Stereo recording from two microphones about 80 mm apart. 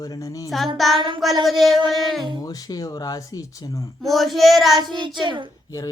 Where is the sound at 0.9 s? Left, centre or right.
Right.